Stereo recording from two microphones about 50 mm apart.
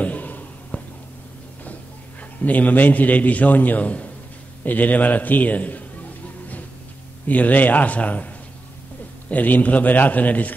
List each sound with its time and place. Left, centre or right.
0.0 s a sound: left
2.4 s a man's voice: left
7.2 s a man's voice: left
9.3 s a man's voice: left